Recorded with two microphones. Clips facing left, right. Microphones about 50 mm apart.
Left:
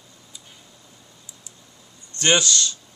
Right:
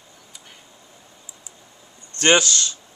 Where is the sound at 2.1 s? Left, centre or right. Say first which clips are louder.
Right 3 dB; right.